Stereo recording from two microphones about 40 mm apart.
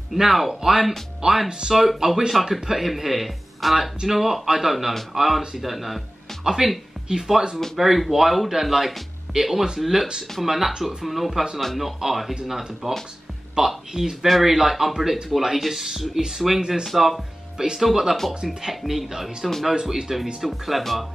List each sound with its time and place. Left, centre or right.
0.1 s speech: centre
18.3 s speech: centre
18.7 s speech: centre